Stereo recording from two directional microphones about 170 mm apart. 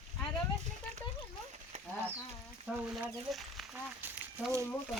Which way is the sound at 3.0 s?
Centre (ahead or behind).